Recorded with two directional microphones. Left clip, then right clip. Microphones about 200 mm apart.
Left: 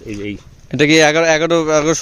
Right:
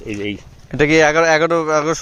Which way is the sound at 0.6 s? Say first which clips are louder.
Left 2 dB; 40° left (ahead or behind).